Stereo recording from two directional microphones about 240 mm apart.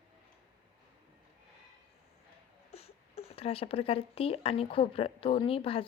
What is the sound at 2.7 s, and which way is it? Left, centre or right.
Speech, left.